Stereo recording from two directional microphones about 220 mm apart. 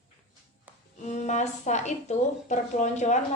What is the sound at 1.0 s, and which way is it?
A woman's voice, 30° left (ahead or behind).